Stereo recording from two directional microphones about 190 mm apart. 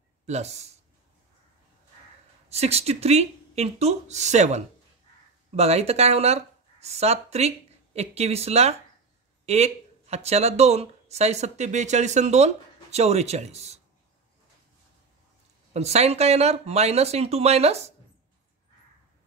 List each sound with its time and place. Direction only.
0.3 s speech: 35° right (ahead or behind)
2.5 s speech: 35° right (ahead or behind)
15.7 s speech: 35° right (ahead or behind)